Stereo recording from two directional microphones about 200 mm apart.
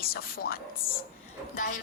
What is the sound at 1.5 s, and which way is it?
Speech, 45° left (ahead or behind).